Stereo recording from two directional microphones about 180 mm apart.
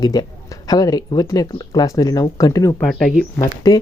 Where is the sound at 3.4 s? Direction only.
20° left (ahead or behind).